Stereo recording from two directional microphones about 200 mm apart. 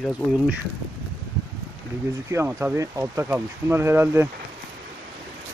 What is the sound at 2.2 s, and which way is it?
Speech, 10° right (ahead or behind).